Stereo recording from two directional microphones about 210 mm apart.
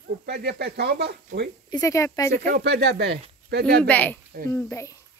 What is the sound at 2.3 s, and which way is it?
Speech, 50° right (ahead or behind).